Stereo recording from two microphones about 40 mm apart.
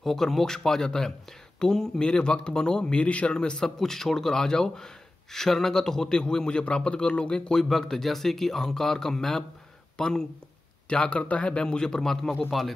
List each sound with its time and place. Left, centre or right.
0.0 s a man's voice: centre; by 3.3 s left
3.3 s a man's voice: centre
10.9 s speech: left; by 12.7 s centre